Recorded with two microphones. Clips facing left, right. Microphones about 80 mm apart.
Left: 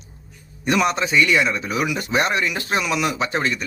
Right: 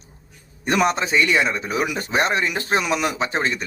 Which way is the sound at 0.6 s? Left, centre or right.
Right.